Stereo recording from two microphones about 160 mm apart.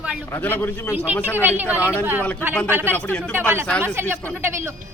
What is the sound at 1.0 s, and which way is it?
Speech, 10° right (ahead or behind).